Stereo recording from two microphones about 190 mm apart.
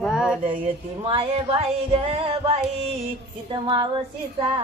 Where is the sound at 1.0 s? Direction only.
30° right (ahead or behind).